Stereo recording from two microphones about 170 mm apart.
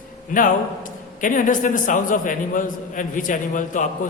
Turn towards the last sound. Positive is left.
turn(degrees=50)  # may be behind; listen again after turning